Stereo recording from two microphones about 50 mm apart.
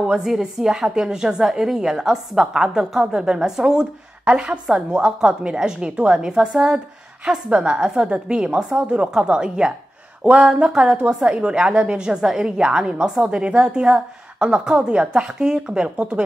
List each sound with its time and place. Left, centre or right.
0.0 s a woman's voice: centre
4.2 s a woman's voice: right